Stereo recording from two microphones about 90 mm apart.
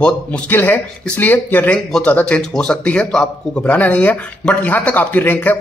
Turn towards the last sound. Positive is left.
turn(degrees=20)  # may be behind; listen again after turning